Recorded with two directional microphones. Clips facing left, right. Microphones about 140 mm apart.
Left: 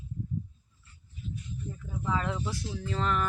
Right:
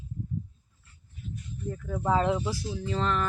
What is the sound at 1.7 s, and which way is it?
Speech, 75° right (ahead or behind).